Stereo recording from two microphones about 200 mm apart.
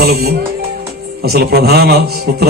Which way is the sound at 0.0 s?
50° right (ahead or behind).